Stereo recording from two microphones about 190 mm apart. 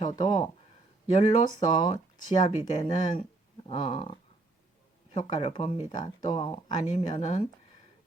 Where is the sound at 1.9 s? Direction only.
40° left (ahead or behind).